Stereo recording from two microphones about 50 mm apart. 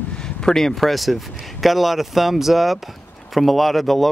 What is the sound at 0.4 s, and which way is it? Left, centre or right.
Speech, centre.